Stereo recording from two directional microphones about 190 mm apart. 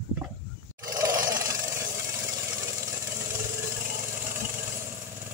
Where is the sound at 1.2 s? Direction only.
15° right (ahead or behind).